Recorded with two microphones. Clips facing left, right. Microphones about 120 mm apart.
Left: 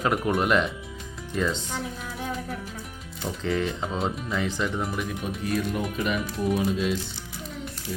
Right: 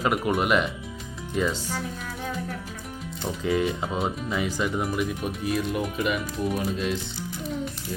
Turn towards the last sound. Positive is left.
turn(degrees=0)  # may be behind; listen again after turning